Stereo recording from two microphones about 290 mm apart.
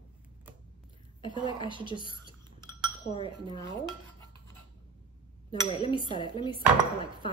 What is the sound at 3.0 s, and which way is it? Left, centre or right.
Speech, centre.